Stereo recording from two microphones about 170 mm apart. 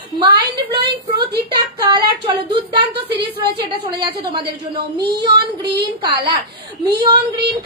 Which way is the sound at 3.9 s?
30° right (ahead or behind).